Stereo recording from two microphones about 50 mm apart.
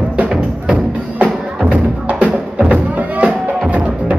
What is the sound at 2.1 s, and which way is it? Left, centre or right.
Music, right.